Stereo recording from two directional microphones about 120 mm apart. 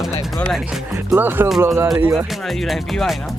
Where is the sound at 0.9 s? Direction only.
20° right (ahead or behind).